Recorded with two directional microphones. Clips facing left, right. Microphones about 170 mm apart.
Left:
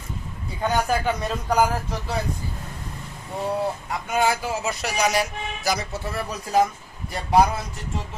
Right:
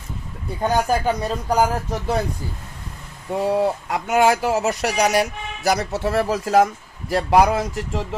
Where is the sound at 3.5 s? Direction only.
75° right (ahead or behind).